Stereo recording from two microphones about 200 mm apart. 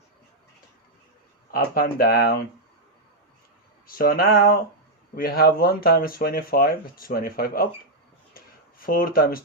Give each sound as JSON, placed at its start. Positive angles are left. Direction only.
{"t": 1.5, "sound": "speech", "side_deg": 45}
{"t": 3.8, "sound": "speech", "side_deg": 45}
{"t": 8.3, "sound": "a sound", "side_deg": 45}